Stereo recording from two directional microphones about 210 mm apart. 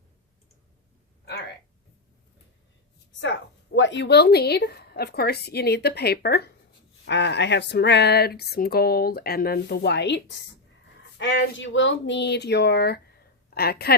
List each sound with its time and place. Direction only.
3.8 s a woman's voice: 60° left (ahead or behind)